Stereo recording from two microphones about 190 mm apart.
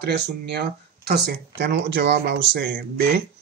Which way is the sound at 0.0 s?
60° right (ahead or behind).